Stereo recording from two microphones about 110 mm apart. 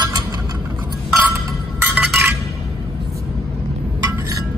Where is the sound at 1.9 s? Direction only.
15° right (ahead or behind).